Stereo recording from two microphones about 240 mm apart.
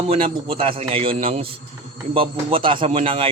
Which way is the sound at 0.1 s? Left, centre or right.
Right.